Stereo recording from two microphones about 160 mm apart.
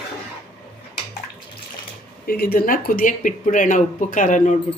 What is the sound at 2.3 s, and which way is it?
Speech, 65° left (ahead or behind).